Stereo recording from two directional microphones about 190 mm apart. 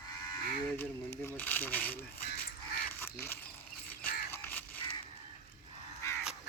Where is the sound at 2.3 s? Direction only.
50° left (ahead or behind).